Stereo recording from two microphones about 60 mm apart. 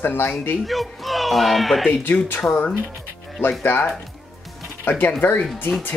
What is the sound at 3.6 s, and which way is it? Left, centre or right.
Speech, left.